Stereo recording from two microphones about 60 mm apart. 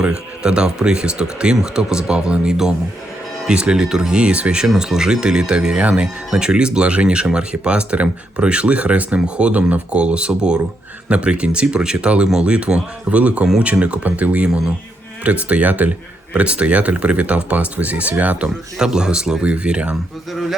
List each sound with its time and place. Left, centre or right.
0.0 s speech: centre